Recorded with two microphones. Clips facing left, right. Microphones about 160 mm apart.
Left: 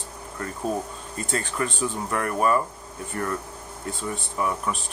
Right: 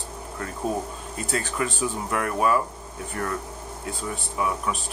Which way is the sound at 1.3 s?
5° right (ahead or behind).